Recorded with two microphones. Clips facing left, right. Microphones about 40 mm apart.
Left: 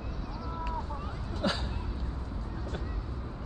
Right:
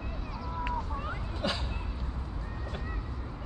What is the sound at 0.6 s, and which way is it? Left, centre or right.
Vehicle, right.